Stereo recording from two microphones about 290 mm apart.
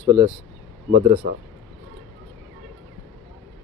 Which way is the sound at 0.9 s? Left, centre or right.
Right.